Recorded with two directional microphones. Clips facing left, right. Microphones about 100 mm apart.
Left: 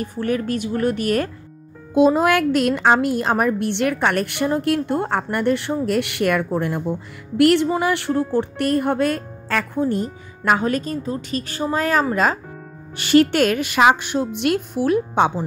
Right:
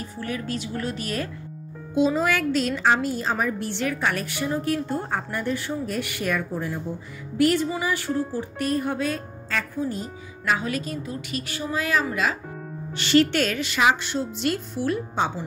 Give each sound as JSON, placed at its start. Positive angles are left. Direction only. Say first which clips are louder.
{"t": 0.0, "sound": "a woman's voice", "louder": "left 8 dB", "side_deg": 50}
{"t": 7.3, "sound": "music", "louder": "left 6 dB", "side_deg": 70}
{"t": 7.7, "sound": "speech", "louder": "left 6 dB", "side_deg": 65}